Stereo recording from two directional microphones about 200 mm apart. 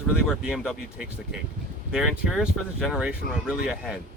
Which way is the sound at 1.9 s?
5° right (ahead or behind).